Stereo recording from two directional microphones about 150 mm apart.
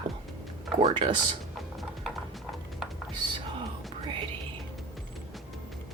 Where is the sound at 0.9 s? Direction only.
30° right (ahead or behind).